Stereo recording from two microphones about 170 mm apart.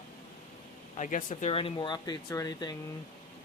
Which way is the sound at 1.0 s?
50° left (ahead or behind).